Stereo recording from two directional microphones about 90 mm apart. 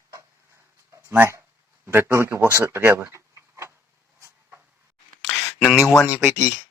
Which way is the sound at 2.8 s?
20° right (ahead or behind).